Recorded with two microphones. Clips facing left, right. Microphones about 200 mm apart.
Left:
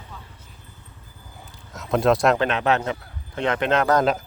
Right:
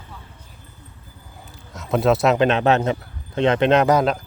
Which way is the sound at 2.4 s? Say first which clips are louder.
Right 5 dB; 25° right (ahead or behind).